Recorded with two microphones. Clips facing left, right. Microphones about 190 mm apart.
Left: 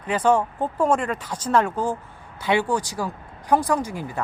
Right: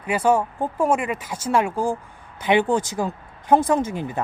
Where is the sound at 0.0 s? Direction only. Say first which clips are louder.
Even; 10° right (ahead or behind).